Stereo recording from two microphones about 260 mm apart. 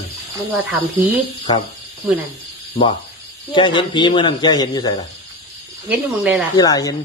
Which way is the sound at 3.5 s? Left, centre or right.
Centre.